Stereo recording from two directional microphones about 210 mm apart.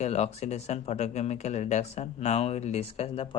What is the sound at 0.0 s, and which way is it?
Speech, 30° left (ahead or behind).